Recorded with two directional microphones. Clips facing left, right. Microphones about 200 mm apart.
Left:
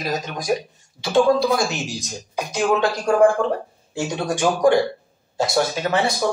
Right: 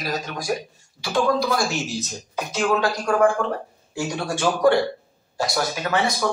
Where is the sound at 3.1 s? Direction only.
30° left (ahead or behind).